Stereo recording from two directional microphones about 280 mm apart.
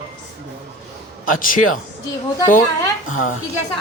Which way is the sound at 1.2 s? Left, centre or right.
Left.